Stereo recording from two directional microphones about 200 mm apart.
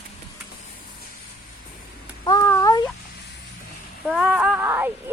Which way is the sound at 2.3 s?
15° left (ahead or behind).